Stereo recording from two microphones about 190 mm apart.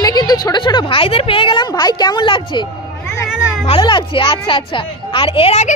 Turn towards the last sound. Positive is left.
turn(degrees=30)  # may be behind; listen again after turning